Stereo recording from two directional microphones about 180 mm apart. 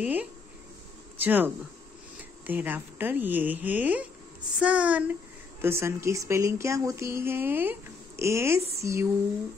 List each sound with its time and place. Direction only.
0.0 s speech: 10° right (ahead or behind)